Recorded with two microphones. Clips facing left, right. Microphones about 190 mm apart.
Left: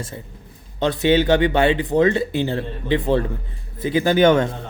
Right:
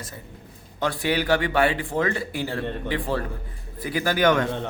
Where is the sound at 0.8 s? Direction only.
25° left (ahead or behind).